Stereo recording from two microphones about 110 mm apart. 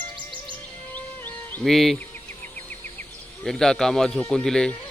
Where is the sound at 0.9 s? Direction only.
15° left (ahead or behind).